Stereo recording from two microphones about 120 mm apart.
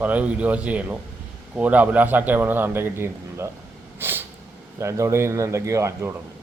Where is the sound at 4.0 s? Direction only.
15° right (ahead or behind).